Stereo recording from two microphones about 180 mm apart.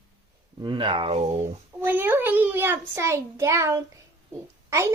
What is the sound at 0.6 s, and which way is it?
Speech, 25° right (ahead or behind).